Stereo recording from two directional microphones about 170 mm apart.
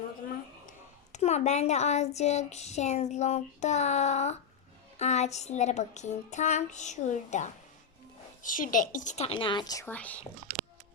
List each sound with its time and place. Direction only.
0.7 s speech: 40° left (ahead or behind)
4.9 s a sound: 40° left (ahead or behind); by 9.8 s 25° left (ahead or behind)
9.8 s speech: 10° left (ahead or behind)